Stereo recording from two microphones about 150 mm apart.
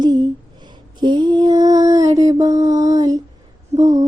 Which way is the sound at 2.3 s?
25° right (ahead or behind).